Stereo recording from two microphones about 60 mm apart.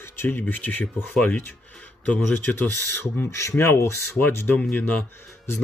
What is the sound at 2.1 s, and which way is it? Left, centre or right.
Speech, left.